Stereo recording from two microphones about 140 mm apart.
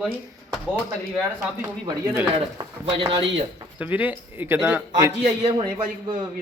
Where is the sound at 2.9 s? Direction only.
35° right (ahead or behind).